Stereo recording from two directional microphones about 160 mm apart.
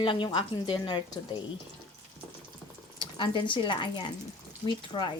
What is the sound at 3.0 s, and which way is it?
Speech, 30° left (ahead or behind).